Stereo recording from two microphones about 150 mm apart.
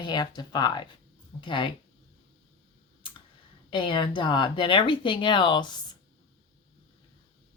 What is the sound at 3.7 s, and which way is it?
Speech, 30° left (ahead or behind).